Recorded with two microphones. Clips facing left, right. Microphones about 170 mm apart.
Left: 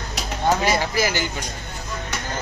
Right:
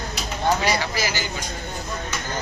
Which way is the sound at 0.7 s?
50° left (ahead or behind).